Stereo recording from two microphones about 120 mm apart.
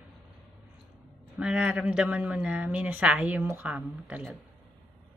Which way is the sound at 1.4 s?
5° right (ahead or behind).